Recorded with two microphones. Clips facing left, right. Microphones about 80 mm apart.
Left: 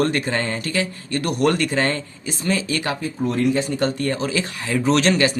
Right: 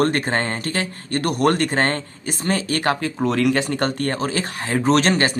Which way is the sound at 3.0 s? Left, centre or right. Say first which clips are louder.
Right 1 dB; right.